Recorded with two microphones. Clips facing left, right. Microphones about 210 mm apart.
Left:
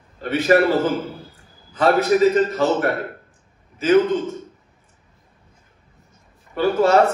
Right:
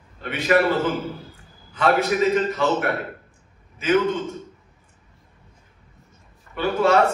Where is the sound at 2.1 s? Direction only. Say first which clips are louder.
Left 5 dB; 40° left (ahead or behind).